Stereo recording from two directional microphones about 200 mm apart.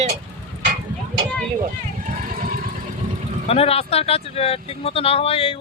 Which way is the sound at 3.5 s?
30° left (ahead or behind).